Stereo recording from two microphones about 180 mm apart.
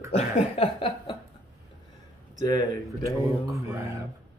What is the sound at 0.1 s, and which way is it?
Speech, 35° left (ahead or behind).